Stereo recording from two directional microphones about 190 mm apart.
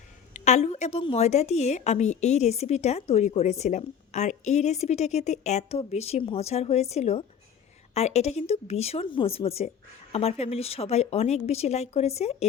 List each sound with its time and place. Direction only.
0.3 s a woman's voice: 35° left (ahead or behind)